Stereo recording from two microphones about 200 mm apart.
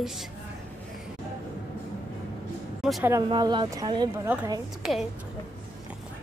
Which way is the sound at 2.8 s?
5° right (ahead or behind).